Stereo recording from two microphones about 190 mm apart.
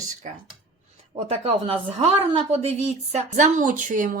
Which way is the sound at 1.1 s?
30° right (ahead or behind).